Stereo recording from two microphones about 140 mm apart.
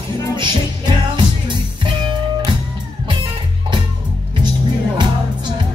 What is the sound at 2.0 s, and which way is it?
Music, 35° right (ahead or behind).